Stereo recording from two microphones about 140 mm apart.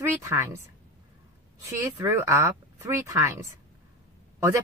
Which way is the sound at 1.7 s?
20° right (ahead or behind).